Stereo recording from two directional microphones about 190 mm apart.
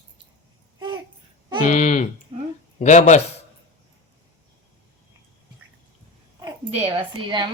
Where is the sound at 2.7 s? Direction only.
35° left (ahead or behind).